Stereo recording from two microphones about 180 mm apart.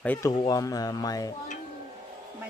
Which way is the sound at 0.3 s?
25° left (ahead or behind).